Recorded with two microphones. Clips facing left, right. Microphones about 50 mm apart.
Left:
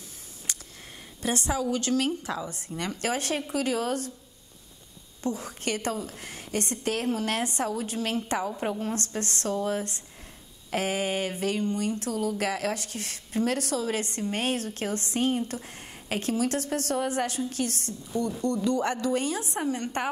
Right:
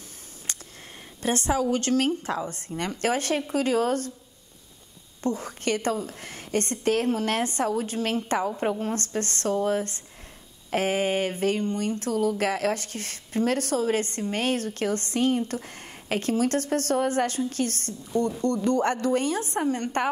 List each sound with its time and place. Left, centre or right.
1.2 s speech: right
5.2 s speech: right
8.5 s speech: right